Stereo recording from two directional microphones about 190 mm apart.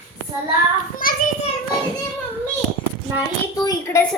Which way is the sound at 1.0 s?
50° left (ahead or behind).